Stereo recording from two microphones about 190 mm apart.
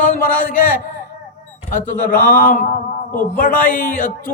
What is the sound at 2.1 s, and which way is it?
A man's voice, 45° left (ahead or behind).